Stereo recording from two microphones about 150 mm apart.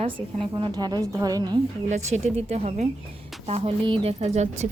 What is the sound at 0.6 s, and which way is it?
A woman's voice, 25° right (ahead or behind).